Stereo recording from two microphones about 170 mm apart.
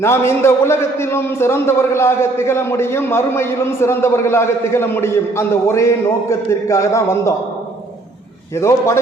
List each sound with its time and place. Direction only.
0.0 s a man's voice: 15° left (ahead or behind)
8.5 s a man's voice: 15° left (ahead or behind)